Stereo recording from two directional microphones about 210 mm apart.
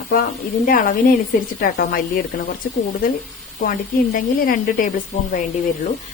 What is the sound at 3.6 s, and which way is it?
Speech, 45° left (ahead or behind).